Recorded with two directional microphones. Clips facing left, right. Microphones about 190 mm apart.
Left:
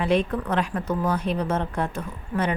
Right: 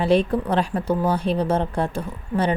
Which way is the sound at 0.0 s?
30° right (ahead or behind).